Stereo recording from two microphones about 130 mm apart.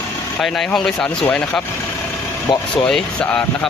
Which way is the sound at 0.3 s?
5° left (ahead or behind).